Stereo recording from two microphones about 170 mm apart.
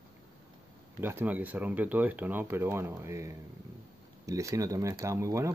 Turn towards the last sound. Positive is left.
turn(degrees=-20)  # may be behind; listen again after turning